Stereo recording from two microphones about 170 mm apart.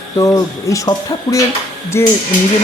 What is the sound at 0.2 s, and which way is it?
Speech, 20° left (ahead or behind).